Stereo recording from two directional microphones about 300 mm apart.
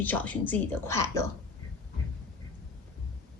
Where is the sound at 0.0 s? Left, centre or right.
Centre.